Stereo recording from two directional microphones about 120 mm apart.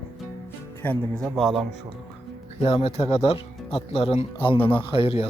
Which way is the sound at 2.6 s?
50° left (ahead or behind).